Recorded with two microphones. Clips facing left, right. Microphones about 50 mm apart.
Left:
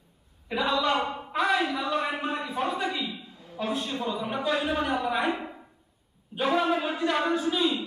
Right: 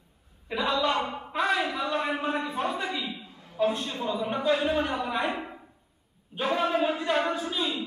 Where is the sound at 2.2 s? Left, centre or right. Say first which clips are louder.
Right 2 dB; right.